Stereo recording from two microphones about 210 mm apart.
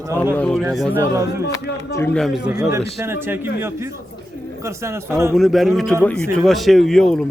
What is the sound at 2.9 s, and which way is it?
A man's voice, 10° right (ahead or behind).